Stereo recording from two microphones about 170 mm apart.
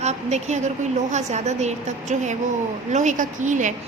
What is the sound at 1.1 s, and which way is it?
A woman's voice, 45° right (ahead or behind).